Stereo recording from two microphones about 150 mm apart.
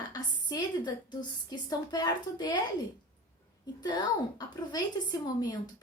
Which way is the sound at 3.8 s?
25° left (ahead or behind).